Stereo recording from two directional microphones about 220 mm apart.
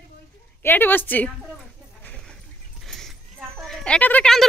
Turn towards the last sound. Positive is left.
turn(degrees=5)  # may be behind; listen again after turning